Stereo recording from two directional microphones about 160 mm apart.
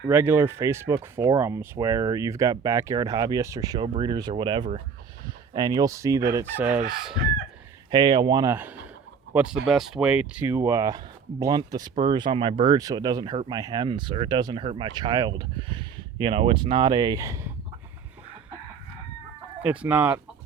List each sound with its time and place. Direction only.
0.1 s speech: 15° right (ahead or behind)
5.2 s fowl: 25° right (ahead or behind); by 6.8 s 10° right (ahead or behind)
7.9 s speech: 30° right (ahead or behind)
9.3 s speech: 10° right (ahead or behind)
19.6 s speech: 10° right (ahead or behind)